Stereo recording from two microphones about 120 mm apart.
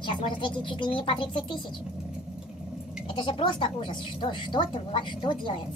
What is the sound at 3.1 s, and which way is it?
Speech, 45° left (ahead or behind).